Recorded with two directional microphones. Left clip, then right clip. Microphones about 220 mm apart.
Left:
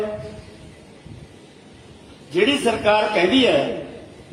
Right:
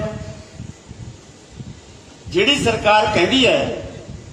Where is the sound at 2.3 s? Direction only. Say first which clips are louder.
Right 2 dB; 45° right (ahead or behind).